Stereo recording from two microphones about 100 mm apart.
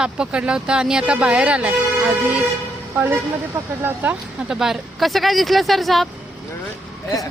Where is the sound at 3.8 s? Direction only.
20° right (ahead or behind).